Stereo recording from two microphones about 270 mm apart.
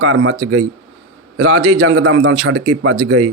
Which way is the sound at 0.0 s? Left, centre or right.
Right.